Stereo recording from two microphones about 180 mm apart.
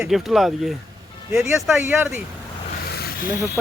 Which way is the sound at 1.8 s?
10° right (ahead or behind).